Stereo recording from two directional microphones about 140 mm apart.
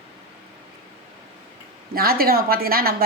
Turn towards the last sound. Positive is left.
turn(degrees=-90)